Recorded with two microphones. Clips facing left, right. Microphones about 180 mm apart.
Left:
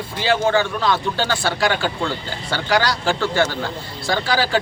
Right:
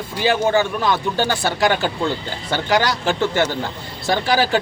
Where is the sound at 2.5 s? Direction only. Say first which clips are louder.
Right 1 dB; 20° right (ahead or behind).